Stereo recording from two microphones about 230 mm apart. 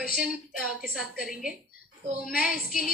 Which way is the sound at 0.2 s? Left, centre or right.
Centre.